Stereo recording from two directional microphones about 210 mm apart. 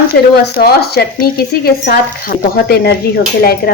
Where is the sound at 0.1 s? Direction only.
50° left (ahead or behind).